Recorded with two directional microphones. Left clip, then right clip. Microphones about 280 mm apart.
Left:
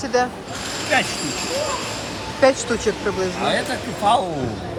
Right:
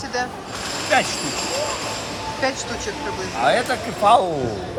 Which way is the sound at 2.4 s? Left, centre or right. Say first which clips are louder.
Left 8 dB; centre.